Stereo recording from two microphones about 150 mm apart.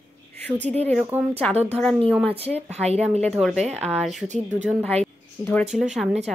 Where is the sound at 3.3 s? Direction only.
Centre (ahead or behind).